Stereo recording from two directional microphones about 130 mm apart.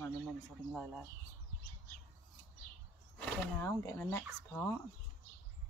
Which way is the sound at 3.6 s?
20° left (ahead or behind).